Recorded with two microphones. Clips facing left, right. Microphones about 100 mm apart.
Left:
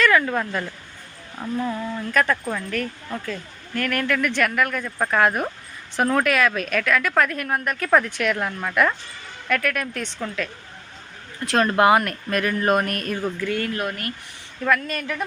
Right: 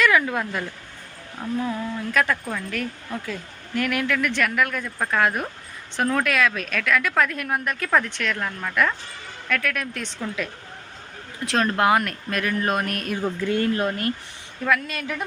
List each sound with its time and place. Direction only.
0.0 s speech: 5° right (ahead or behind)
11.4 s speech: centre (ahead or behind)
13.1 s speech: 20° right (ahead or behind)
14.6 s speech: centre (ahead or behind)